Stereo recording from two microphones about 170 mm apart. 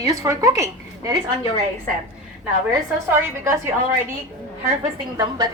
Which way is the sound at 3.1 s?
15° right (ahead or behind).